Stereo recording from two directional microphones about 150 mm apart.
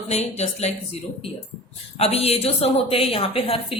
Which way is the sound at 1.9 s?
40° left (ahead or behind).